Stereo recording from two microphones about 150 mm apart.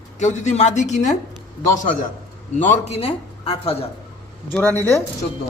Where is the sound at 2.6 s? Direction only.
40° left (ahead or behind).